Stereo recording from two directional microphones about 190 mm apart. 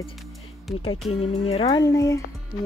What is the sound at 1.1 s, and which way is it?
Speech, 30° left (ahead or behind).